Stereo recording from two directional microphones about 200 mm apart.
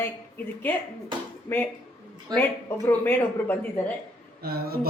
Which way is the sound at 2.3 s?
20° right (ahead or behind).